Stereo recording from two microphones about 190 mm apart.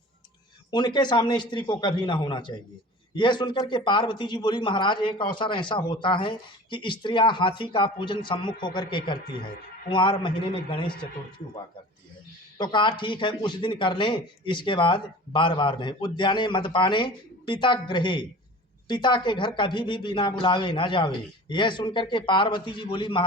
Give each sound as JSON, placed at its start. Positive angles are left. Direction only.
{"t": 0.7, "sound": "speech", "side_deg": 20}
{"t": 12.5, "sound": "speech", "side_deg": 25}